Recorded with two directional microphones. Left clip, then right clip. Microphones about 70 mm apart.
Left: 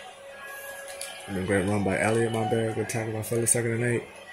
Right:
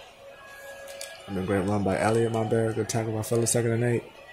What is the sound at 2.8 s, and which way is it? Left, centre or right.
Speech, right.